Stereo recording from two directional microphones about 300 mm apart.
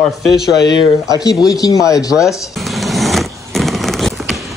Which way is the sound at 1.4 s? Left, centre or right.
Centre.